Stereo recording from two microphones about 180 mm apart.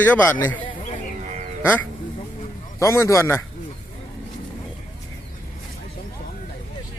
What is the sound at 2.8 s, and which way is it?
Speech, 15° left (ahead or behind).